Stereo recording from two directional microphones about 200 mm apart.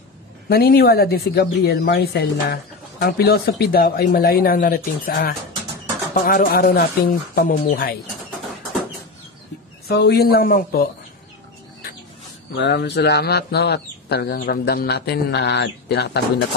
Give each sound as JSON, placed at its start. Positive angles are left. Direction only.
{"t": 0.5, "sound": "speech", "side_deg": 50}
{"t": 9.8, "sound": "speech", "side_deg": 55}
{"t": 12.5, "sound": "speech", "side_deg": 60}